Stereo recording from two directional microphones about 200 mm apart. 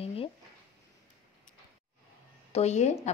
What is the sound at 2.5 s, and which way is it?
Speech, 35° left (ahead or behind).